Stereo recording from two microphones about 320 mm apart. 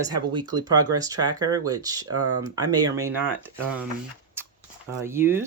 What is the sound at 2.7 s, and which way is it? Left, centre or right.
Speech, centre.